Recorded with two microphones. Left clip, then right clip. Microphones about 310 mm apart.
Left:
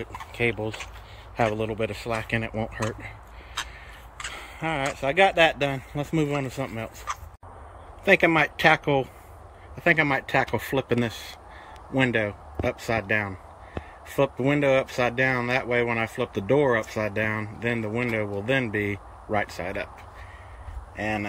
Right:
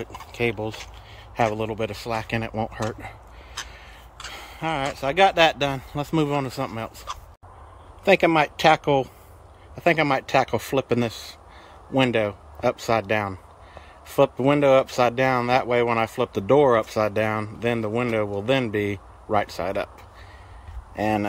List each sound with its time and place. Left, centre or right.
0.0 s speech: centre
8.0 s speech: centre
21.0 s speech: centre